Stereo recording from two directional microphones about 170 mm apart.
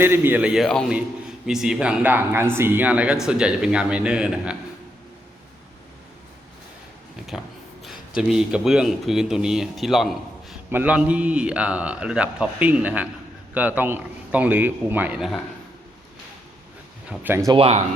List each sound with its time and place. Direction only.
0.0 s a man's voice: 15° right (ahead or behind)
7.2 s a man's voice: 5° right (ahead or behind)
17.1 s a man's voice: 15° right (ahead or behind)
17.5 s speech: 35° right (ahead or behind)